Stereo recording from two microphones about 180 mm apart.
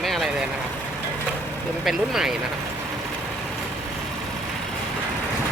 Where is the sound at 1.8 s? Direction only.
Centre (ahead or behind).